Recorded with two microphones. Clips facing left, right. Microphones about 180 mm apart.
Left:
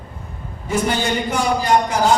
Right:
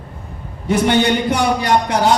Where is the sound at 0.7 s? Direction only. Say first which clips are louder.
Right 5 dB; 65° right (ahead or behind).